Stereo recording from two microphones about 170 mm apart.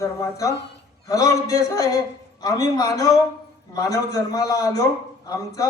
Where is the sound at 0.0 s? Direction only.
20° left (ahead or behind).